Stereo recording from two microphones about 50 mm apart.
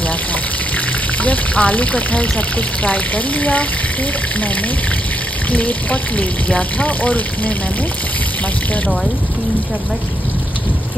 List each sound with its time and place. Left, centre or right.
1.2 s speech: left
5.5 s speech: left